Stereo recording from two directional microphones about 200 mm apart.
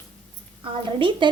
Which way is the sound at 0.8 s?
25° right (ahead or behind).